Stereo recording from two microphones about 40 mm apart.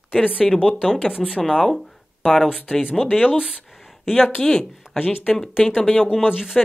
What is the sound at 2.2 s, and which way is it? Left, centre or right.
Speech, centre.